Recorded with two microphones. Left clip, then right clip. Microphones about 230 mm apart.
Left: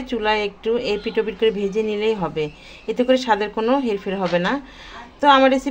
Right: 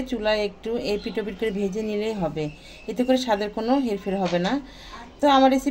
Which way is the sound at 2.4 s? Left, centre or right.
Centre.